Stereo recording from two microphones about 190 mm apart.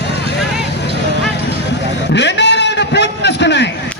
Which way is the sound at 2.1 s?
65° left (ahead or behind).